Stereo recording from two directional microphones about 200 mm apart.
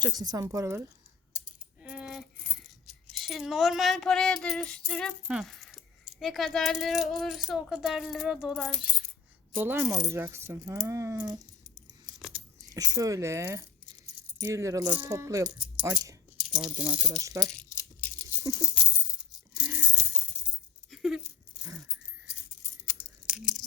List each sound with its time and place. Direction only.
0.0 s speech: 20° right (ahead or behind)
1.8 s speech: 5° right (ahead or behind)
9.6 s speech: 10° right (ahead or behind)
17.4 s coin: 5° left (ahead or behind)
18.7 s coin: 25° left (ahead or behind)
20.9 s keys jangling: centre (ahead or behind)
21.6 s dog: 15° right (ahead or behind)
22.9 s keys jangling: 5° right (ahead or behind)